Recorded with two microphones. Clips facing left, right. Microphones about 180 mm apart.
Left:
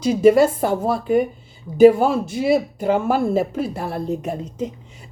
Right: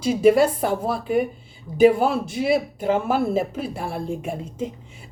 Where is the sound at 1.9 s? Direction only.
45° left (ahead or behind).